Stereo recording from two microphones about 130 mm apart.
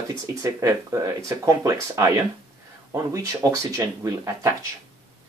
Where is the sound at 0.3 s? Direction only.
25° right (ahead or behind).